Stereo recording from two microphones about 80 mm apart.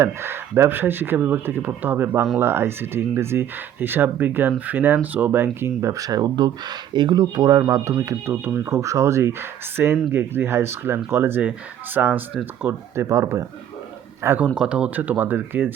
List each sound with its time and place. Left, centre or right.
0.0 s speech: right
13.1 s speech: right
14.3 s speech: centre